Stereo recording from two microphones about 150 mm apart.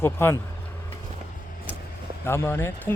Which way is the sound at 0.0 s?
15° left (ahead or behind).